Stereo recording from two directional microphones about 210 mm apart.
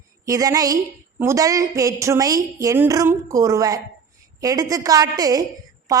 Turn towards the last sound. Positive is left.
turn(degrees=-15)  # may be behind; listen again after turning